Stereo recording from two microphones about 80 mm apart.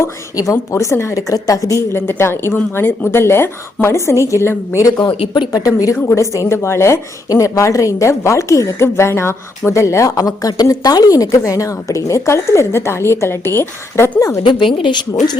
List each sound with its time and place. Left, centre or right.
0.0 s a woman's voice: left
4.9 s speech: left
5.5 s speech: left
6.1 s a woman's voice: left
14.2 s a woman's voice: left
14.4 s speech: left